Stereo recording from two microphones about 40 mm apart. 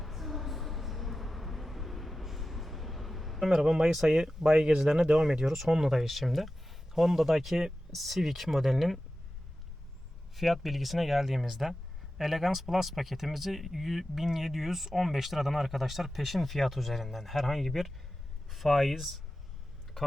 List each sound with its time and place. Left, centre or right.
0.0 s vehicle: centre
4.4 s speech: centre
10.3 s speech: centre